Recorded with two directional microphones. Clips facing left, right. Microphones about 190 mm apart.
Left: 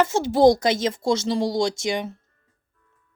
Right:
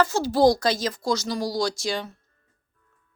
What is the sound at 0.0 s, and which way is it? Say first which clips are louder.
A woman's voice: left 3 dB; 25° left (ahead or behind).